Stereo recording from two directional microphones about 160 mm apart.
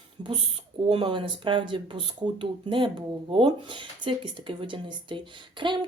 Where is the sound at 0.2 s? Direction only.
25° right (ahead or behind).